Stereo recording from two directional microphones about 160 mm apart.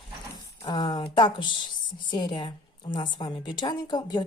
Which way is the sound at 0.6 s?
30° left (ahead or behind).